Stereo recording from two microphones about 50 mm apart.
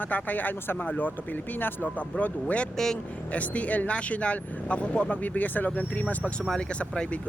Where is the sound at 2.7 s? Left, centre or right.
Centre.